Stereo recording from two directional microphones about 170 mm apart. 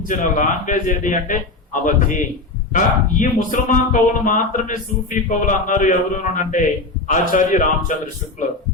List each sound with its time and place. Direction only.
0.1 s speech: 50° left (ahead or behind)